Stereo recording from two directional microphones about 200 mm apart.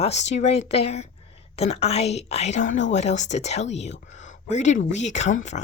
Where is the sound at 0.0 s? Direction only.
35° left (ahead or behind).